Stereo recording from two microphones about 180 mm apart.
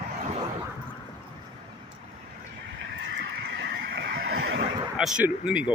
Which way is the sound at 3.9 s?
75° right (ahead or behind).